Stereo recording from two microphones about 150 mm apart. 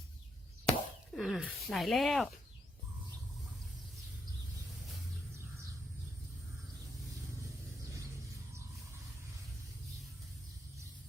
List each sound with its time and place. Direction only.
0.6 s plop: centre (ahead or behind)
1.5 s speech: centre (ahead or behind)